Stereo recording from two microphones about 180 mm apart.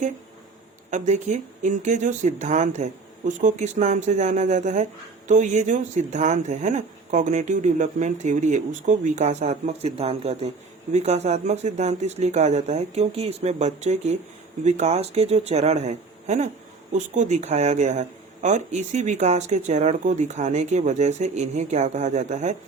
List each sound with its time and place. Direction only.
0.9 s speech: 45° right (ahead or behind)